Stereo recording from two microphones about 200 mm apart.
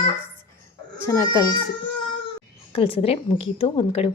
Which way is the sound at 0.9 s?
15° left (ahead or behind).